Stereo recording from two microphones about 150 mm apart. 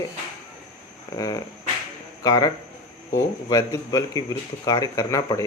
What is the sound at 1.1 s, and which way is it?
Speech, 25° left (ahead or behind).